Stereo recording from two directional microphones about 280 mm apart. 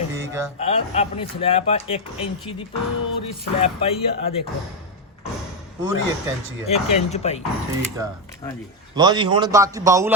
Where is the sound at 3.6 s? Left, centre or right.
Left.